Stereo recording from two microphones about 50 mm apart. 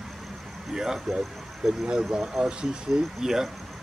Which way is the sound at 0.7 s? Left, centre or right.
Centre.